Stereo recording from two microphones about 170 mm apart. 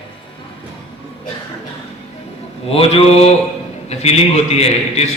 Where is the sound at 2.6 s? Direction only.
35° left (ahead or behind).